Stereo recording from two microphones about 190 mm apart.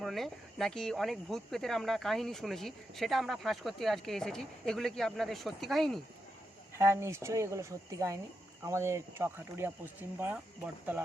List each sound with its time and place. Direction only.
0.0 s speech: centre (ahead or behind)
6.7 s speech: 15° right (ahead or behind)